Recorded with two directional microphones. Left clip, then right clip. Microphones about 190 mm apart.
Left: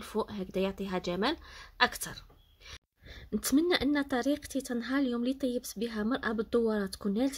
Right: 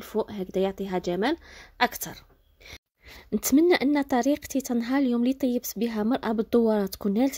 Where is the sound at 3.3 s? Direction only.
40° right (ahead or behind).